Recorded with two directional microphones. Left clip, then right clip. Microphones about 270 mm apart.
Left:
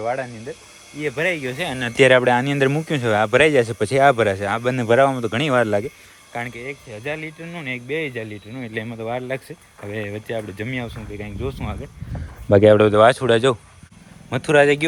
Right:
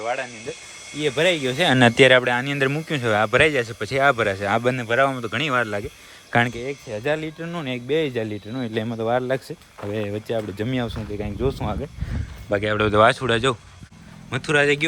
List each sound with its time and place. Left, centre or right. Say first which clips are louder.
0.0 s speech: left 2 dB; centre
6.3 s speech: right 7 dB; right
12.5 s speech: left 6 dB; centre